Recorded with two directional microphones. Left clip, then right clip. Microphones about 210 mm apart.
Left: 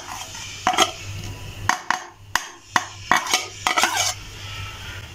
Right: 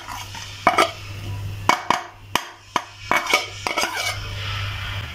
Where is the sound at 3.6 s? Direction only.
15° right (ahead or behind).